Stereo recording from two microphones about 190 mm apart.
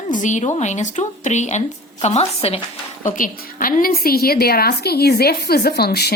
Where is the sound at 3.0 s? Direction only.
45° left (ahead or behind).